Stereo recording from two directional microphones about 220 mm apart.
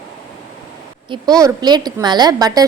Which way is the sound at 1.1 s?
15° right (ahead or behind).